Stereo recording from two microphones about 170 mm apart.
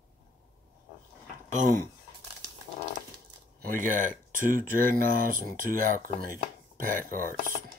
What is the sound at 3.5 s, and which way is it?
Speech, 55° right (ahead or behind).